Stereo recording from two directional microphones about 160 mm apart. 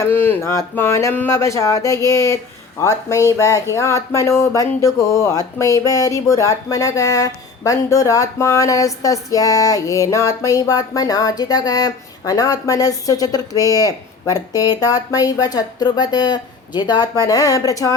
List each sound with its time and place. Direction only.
0.1 s speech: 15° left (ahead or behind)